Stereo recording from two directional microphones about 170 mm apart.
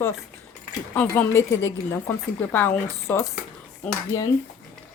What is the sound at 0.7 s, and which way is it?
Speech, 15° left (ahead or behind).